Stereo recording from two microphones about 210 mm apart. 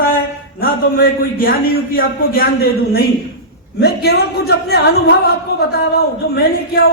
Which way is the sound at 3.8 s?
50° left (ahead or behind).